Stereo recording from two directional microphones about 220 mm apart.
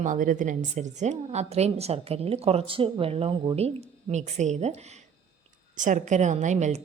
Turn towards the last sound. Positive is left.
turn(degrees=-30)  # may be behind; listen again after turning